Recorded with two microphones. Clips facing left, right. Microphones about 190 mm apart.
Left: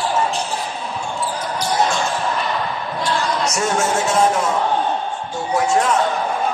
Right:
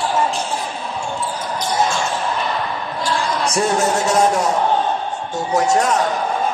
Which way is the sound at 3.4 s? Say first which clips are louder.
Right 2 dB; 35° right (ahead or behind).